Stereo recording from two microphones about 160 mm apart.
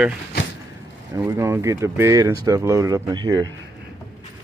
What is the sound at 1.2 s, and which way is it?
Speech, 15° right (ahead or behind).